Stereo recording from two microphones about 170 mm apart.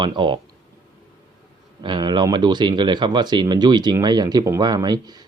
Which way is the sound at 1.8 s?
25° right (ahead or behind).